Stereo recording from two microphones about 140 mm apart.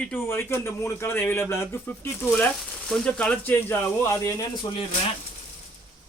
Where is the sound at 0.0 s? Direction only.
15° left (ahead or behind).